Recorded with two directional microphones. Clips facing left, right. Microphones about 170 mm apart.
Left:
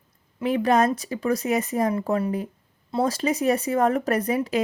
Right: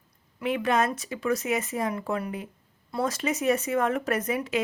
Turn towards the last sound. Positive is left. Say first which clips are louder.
# left 4 dB
turn(degrees=35)  # may be behind; listen again after turning